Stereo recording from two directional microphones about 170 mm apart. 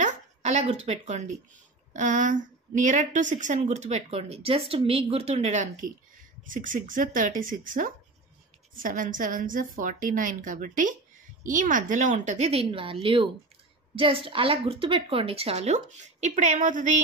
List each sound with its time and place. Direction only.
0.0 s a woman's voice: 45° right (ahead or behind)